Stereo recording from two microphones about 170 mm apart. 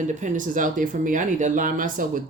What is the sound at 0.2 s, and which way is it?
Speech, 50° right (ahead or behind).